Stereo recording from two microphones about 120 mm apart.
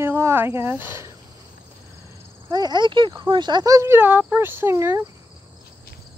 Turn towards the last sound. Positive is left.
turn(degrees=-20)  # may be behind; listen again after turning